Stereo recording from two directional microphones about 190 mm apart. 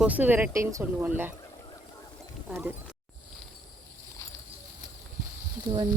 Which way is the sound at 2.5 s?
10° right (ahead or behind).